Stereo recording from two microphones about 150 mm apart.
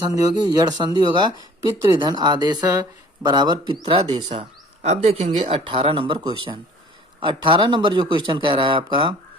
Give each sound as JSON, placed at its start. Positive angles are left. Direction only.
{"t": 0.1, "sound": "speech", "side_deg": -25}
{"t": 4.3, "sound": "speech", "side_deg": -45}